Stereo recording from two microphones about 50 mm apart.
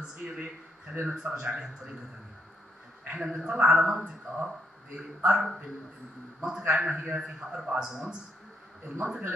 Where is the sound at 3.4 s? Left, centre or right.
Centre.